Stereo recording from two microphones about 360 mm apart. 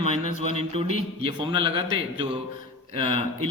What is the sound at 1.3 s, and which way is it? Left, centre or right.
A man's voice, centre.